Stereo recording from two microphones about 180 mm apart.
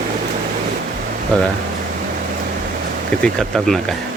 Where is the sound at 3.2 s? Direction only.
Centre (ahead or behind).